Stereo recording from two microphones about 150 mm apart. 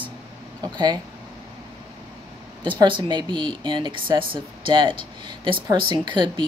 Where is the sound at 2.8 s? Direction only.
30° right (ahead or behind).